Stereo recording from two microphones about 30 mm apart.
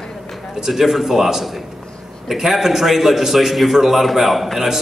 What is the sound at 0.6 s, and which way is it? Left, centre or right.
A man's voice, centre.